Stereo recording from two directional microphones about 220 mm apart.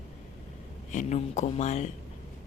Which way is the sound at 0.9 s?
35° left (ahead or behind).